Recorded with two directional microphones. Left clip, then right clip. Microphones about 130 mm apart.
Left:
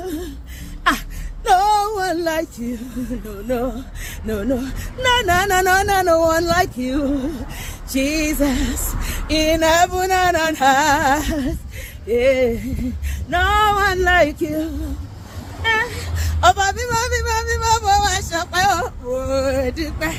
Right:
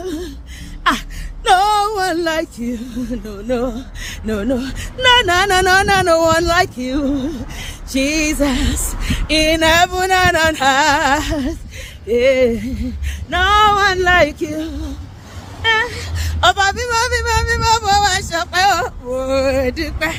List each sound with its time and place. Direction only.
0.0 s a sound: 45° right (ahead or behind)
1.5 s female singing: 20° right (ahead or behind)
3.4 s a sound: 35° right (ahead or behind)
4.3 s speech: 25° right (ahead or behind)
12.0 s female singing: 40° right (ahead or behind)
15.6 s whimper: 45° right (ahead or behind)
16.1 s speech: 20° right (ahead or behind)